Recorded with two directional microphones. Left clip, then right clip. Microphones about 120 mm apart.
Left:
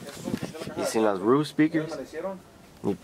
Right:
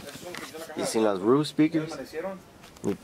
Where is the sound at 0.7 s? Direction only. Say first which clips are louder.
Left 1 dB; 5° left (ahead or behind).